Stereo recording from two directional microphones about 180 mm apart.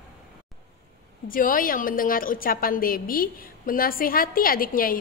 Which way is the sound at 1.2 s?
50° left (ahead or behind).